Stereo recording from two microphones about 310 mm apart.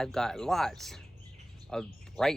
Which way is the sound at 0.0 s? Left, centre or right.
Centre.